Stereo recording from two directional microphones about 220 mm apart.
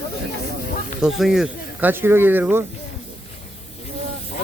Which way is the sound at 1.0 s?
Centre (ahead or behind).